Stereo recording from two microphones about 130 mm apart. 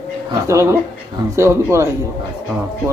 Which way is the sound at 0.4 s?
20° right (ahead or behind).